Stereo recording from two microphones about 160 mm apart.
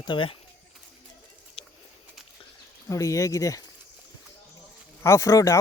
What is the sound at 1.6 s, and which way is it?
Bird, 40° left (ahead or behind).